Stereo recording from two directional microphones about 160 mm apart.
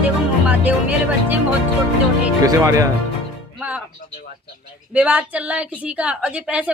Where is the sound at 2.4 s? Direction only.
20° right (ahead or behind).